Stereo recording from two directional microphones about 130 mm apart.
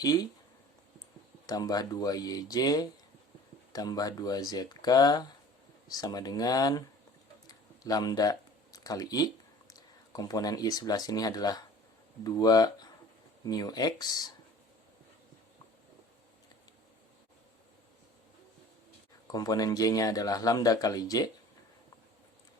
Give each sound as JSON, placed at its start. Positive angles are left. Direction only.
{"t": 0.0, "sound": "a man's voice", "side_deg": 30}
{"t": 1.5, "sound": "a man's voice", "side_deg": 30}
{"t": 7.4, "sound": "a sound", "side_deg": 30}
{"t": 12.2, "sound": "a man's voice", "side_deg": 30}
{"t": 19.3, "sound": "a man's voice", "side_deg": 30}